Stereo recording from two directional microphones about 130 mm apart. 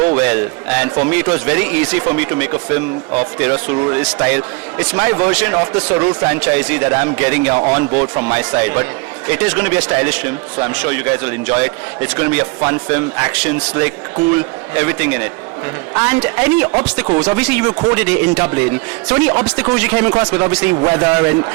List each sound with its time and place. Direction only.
0.0 s a man's voice: 15° right (ahead or behind)
6.4 s a man's voice: 10° right (ahead or behind)
17.1 s speech: 35° right (ahead or behind)
17.3 s a man's voice: 15° right (ahead or behind)